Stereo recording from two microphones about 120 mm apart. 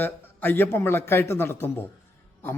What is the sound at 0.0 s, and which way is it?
A man's voice, 15° left (ahead or behind).